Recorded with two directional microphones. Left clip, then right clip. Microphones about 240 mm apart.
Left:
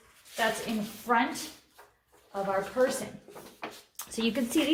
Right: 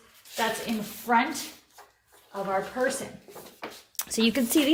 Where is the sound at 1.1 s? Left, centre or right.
Right.